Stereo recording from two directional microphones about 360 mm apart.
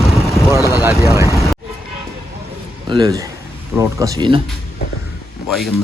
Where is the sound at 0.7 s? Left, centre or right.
Centre.